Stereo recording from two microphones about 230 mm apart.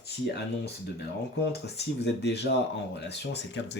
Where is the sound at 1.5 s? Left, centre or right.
Left.